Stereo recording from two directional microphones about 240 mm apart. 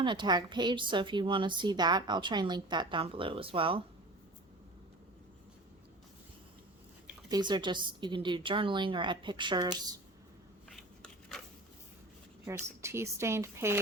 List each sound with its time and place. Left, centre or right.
0.0 s a woman's voice: centre
7.3 s a woman's voice: centre
10.7 s a sound: centre
12.5 s a woman's voice: centre